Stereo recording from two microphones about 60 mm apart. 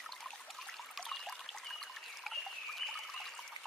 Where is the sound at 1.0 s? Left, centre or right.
Centre.